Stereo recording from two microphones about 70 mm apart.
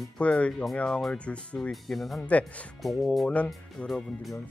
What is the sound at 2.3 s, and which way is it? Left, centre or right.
Speech, centre.